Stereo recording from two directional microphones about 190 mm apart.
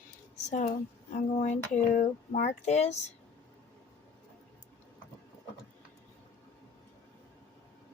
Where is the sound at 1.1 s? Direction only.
40° left (ahead or behind).